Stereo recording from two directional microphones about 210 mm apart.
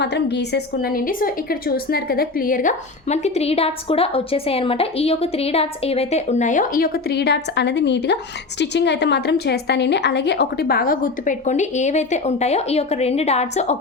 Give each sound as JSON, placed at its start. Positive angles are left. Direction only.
{"t": 0.0, "sound": "a woman's voice", "side_deg": 55}